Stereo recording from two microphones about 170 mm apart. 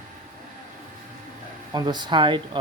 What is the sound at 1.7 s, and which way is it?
Speech, 25° right (ahead or behind).